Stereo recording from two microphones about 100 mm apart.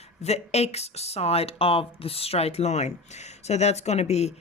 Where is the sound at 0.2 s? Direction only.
90° left.